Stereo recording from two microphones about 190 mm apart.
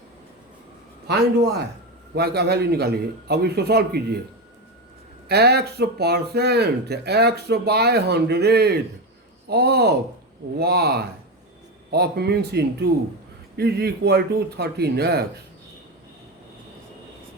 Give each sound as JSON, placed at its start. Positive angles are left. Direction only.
{"t": 1.0, "sound": "speech", "side_deg": -60}
{"t": 5.3, "sound": "speech", "side_deg": -60}